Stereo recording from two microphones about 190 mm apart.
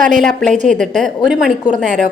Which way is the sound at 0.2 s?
Centre (ahead or behind).